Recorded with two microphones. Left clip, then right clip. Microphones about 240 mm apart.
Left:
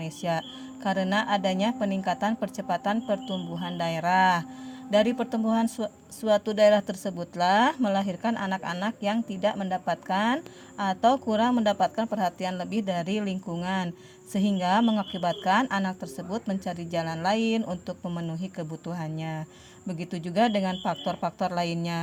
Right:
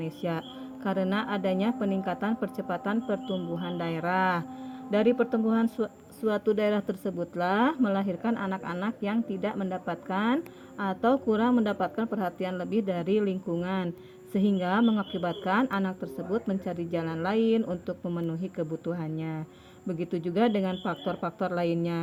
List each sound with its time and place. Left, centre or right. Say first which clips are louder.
0.0 s speech: left 3 dB; left